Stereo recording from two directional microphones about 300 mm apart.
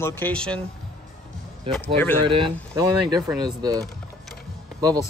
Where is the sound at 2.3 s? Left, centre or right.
Centre.